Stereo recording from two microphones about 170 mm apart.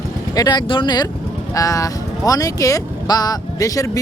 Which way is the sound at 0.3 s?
25° left (ahead or behind).